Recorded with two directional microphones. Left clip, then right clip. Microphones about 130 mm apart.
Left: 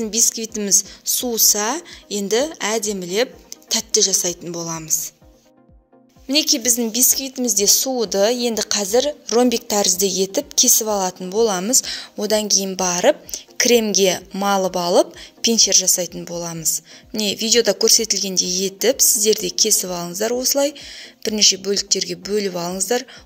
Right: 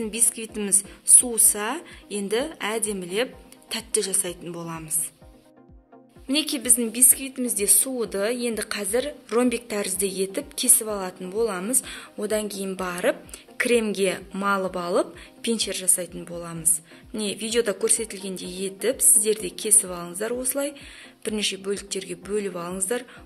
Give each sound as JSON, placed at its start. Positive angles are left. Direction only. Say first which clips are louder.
{"t": 0.0, "sound": "a woman's voice", "louder": "left 9 dB", "side_deg": 35}
{"t": 6.2, "sound": "a woman's voice", "louder": "left 8 dB", "side_deg": 35}